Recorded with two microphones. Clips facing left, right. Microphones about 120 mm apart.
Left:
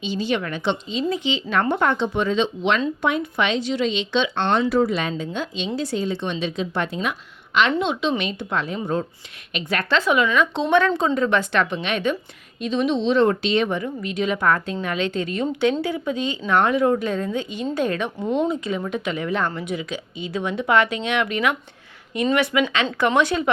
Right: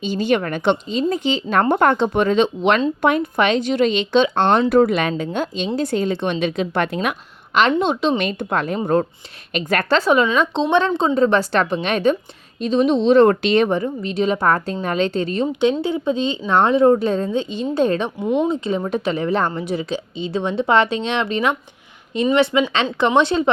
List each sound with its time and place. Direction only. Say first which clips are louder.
0.0 s speech: right 5 dB; 50° right (ahead or behind)
7.8 s a woman's voice: right 4 dB; 40° right (ahead or behind)
13.7 s a woman's voice: right 5 dB; 35° right (ahead or behind)
18.2 s speech: right 2 dB; 5° right (ahead or behind)
18.4 s a woman's voice: right 3 dB; 25° right (ahead or behind)